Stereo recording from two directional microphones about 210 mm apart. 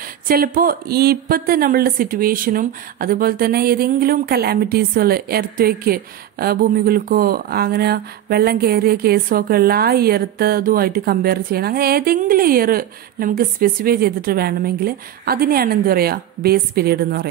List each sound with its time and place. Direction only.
0.3 s speech: 45° right (ahead or behind)